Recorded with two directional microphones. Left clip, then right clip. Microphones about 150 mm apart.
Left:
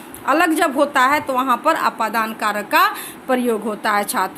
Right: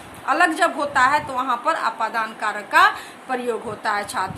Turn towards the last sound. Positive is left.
turn(degrees=55)  # may be behind; listen again after turning